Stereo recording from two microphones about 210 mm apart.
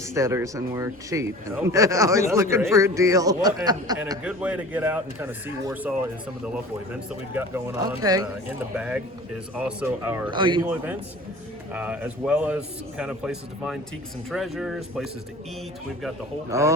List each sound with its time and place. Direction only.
0.0 s speech: 15° right (ahead or behind)
4.2 s speech: 5° right (ahead or behind)
8.7 s a man's voice: 5° right (ahead or behind)
10.3 s speech: 20° right (ahead or behind)
11.7 s a man's voice: 5° right (ahead or behind)
16.5 s speech: 15° right (ahead or behind)